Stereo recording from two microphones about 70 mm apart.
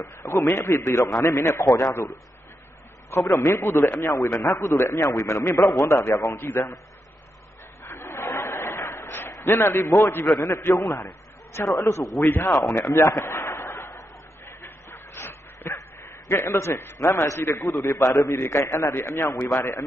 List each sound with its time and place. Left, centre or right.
0.0 s a man's voice: left
3.4 s a man's voice: left
4.3 s a man's voice: left
6.3 s a man's voice: left
7.8 s a sound: left
10.4 s a man's voice: left
12.2 s speech: left
12.6 s a sound: left
17.8 s a man's voice: left